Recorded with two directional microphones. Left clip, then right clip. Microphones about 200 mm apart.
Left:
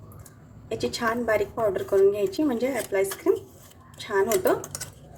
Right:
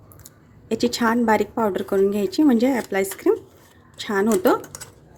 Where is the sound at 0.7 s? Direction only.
50° right (ahead or behind).